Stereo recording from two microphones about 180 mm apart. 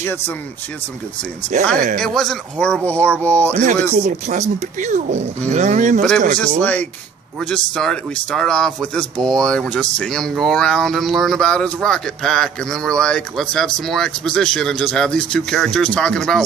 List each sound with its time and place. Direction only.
0.0 s speech: 10° left (ahead or behind)
1.7 s speech: 50° right (ahead or behind)
2.0 s speech: 5° left (ahead or behind)
3.5 s speech: 40° right (ahead or behind)
6.6 s speech: 10° left (ahead or behind)